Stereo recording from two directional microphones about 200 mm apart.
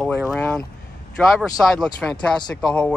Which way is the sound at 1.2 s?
Centre (ahead or behind).